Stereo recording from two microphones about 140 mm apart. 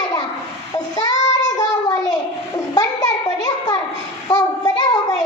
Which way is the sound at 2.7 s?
25° left (ahead or behind).